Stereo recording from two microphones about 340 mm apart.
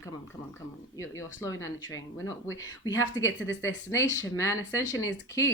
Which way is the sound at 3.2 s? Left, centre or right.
Centre.